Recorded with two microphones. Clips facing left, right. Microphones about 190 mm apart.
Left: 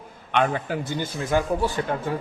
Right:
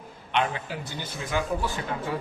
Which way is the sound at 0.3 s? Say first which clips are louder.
Left 5 dB; 50° left (ahead or behind).